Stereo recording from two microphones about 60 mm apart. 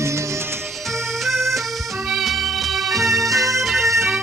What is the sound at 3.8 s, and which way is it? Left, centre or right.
Music, right.